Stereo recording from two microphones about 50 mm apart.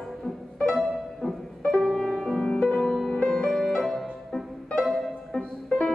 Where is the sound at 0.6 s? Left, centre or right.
Centre.